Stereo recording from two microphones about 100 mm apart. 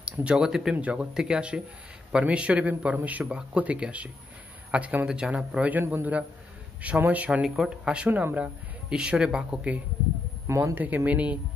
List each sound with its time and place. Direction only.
0.0 s a man's voice: 10° right (ahead or behind)
7.4 s a man's voice: 5° right (ahead or behind)
10.4 s speech: 25° right (ahead or behind)